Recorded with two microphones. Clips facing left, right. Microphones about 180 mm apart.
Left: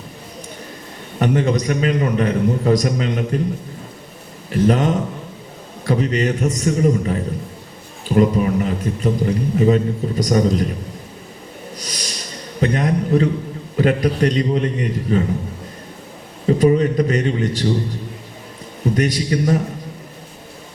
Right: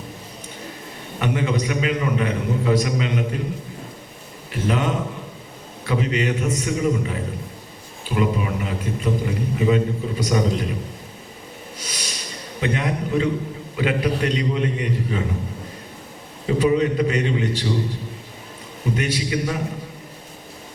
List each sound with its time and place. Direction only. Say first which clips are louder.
1.2 s a man's voice: left 5 dB; 40° left (ahead or behind)
4.4 s a man's voice: left 6 dB; 40° left (ahead or behind)
11.8 s snort: left 1 dB; 40° left (ahead or behind)
12.5 s a man's voice: left 5 dB; 40° left (ahead or behind)
16.5 s a man's voice: left 4 dB; 40° left (ahead or behind)
18.9 s a man's voice: left 5 dB; 40° left (ahead or behind)